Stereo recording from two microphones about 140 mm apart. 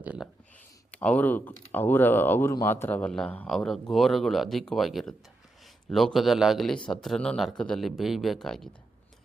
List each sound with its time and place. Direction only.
0.0 s speech: 10° right (ahead or behind)
0.9 s speech: 10° left (ahead or behind)